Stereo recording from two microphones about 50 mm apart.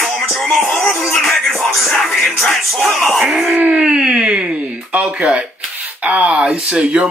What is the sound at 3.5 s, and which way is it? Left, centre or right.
Speech, right.